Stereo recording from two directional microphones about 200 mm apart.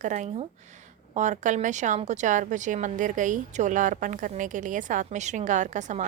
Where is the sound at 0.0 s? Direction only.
35° right (ahead or behind).